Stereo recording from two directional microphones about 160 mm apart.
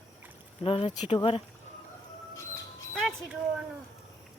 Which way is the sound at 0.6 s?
35° left (ahead or behind).